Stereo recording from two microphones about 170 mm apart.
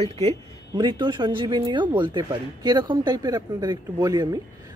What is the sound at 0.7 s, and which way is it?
Speech, 25° right (ahead or behind).